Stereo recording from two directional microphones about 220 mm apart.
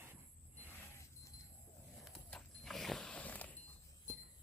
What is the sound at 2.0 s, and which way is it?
Horse, centre (ahead or behind).